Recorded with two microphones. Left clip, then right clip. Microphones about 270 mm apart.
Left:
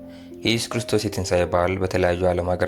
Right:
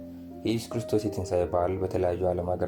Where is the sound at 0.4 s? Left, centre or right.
Left.